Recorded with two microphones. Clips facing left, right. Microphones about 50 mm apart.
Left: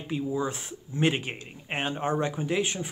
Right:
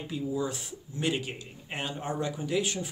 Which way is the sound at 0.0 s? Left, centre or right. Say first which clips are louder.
Left 2 dB; left.